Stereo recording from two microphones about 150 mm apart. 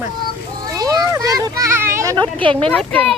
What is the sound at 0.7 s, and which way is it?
A child's voice, 25° right (ahead or behind).